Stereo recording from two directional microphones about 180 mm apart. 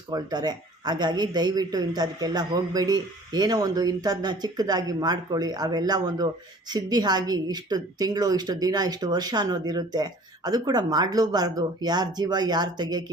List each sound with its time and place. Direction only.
0.1 s a man's voice: 20° right (ahead or behind)